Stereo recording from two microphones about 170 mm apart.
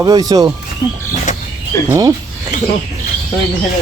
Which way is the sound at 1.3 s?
45° left (ahead or behind).